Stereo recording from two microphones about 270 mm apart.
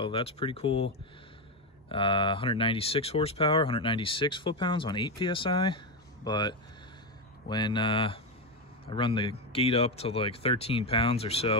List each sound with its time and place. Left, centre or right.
0.0 s speech: centre
1.9 s speech: centre